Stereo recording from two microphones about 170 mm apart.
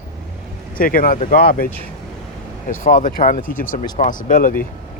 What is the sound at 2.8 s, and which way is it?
Speech, 50° left (ahead or behind).